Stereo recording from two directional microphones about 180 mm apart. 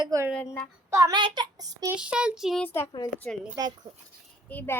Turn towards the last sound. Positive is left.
turn(degrees=10)  # may be behind; listen again after turning